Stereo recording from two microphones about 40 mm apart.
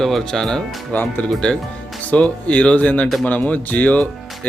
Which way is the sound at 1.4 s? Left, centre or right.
Left.